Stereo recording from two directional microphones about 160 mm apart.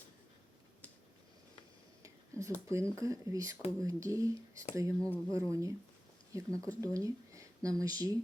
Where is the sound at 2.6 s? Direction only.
20° right (ahead or behind).